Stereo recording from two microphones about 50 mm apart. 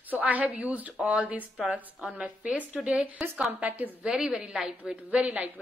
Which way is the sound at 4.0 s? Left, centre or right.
Centre.